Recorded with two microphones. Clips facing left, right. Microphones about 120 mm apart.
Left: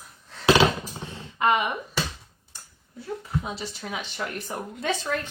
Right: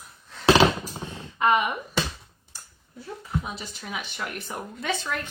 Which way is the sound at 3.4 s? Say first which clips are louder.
Left 3 dB; 30° left (ahead or behind).